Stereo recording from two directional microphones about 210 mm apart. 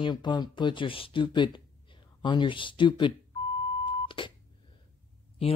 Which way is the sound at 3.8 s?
25° left (ahead or behind).